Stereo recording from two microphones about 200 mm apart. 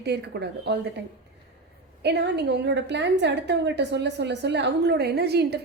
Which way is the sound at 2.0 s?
55° right (ahead or behind).